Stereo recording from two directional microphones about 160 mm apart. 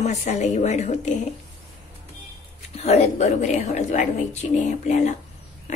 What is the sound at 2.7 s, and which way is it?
A woman's voice, 40° left (ahead or behind).